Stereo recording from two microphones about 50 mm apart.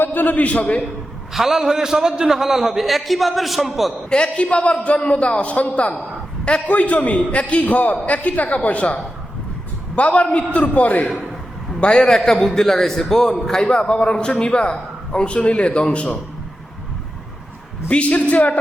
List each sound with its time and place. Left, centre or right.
0.0 s a man's voice: left
1.3 s a man's voice: centre
4.1 s a man's voice: left
11.8 s a man's voice: centre
17.8 s a man's voice: left